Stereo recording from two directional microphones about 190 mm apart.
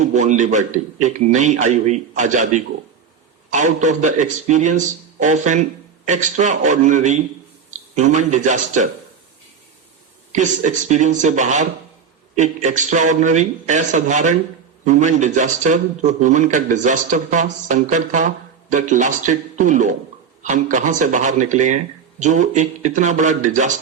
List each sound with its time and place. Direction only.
0.0 s a man's voice: 40° right (ahead or behind)
10.3 s a man's voice: 40° right (ahead or behind)